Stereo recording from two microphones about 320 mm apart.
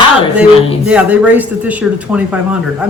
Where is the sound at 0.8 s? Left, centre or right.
Centre.